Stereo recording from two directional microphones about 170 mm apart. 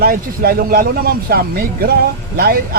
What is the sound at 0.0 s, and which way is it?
Speech, 60° right (ahead or behind).